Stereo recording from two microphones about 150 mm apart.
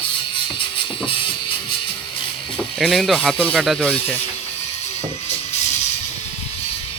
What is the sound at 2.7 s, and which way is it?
Speech, centre (ahead or behind).